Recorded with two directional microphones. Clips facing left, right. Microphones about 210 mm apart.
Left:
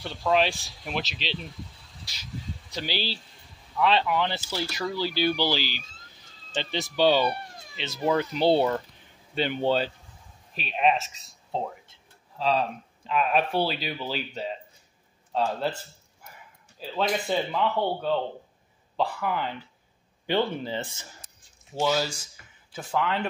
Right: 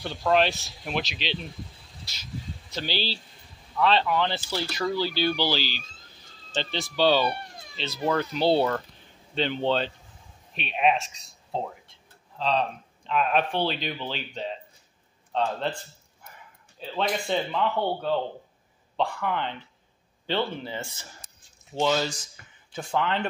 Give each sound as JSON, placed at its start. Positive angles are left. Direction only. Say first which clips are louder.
{"t": 0.0, "sound": "speech", "louder": "right 1 dB", "side_deg": 0}
{"t": 2.7, "sound": "speech", "louder": "right 1 dB", "side_deg": 10}
{"t": 16.9, "sound": "speech", "louder": "left 1 dB", "side_deg": 5}
{"t": 21.7, "sound": "speech", "louder": "right 1 dB", "side_deg": 10}